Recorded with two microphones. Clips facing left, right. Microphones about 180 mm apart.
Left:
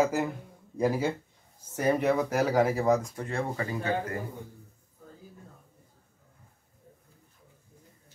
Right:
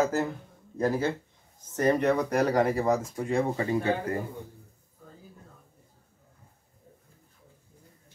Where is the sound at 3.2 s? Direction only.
15° right (ahead or behind).